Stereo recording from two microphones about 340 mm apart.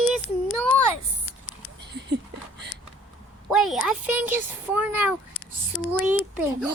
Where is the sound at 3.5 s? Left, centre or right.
Centre.